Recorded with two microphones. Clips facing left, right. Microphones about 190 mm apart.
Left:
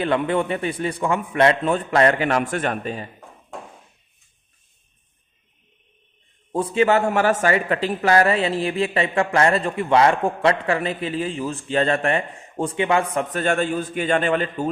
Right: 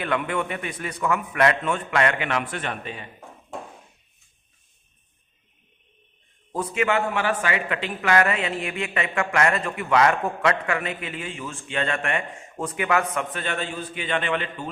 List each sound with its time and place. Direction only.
0.0 s a man's voice: 30° left (ahead or behind)
6.5 s a man's voice: 30° left (ahead or behind)
13.3 s a man's voice: 45° left (ahead or behind)